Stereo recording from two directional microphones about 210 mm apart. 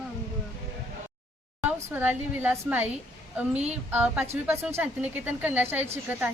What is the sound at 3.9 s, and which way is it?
A woman's voice, 5° right (ahead or behind).